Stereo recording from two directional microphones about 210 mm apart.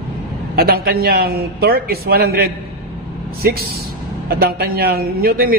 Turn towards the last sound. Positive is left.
turn(degrees=-45)  # may be behind; listen again after turning